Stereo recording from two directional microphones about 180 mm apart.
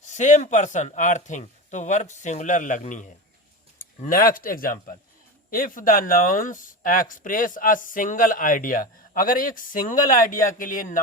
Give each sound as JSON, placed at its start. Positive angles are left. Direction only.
{"t": 0.0, "sound": "speech", "side_deg": 40}